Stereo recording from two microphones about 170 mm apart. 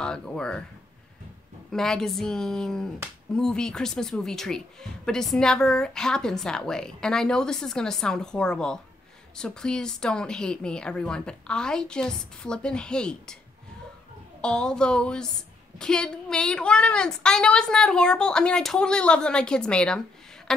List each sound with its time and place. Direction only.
0.0 s a man's voice: 5° left (ahead or behind)
1.7 s a man's voice: centre (ahead or behind)
14.4 s a man's voice: 5° left (ahead or behind)